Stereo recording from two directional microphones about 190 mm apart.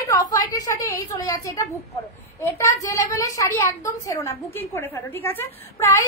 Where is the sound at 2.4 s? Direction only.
15° left (ahead or behind).